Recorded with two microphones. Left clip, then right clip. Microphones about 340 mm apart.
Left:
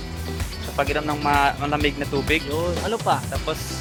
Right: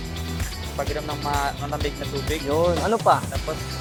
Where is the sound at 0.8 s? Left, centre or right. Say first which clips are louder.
Left 5 dB; left.